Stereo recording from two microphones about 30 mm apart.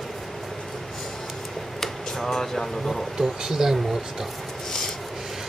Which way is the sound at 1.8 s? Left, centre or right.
Centre.